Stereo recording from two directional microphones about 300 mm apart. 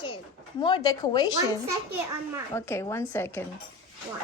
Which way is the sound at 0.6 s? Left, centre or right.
Centre.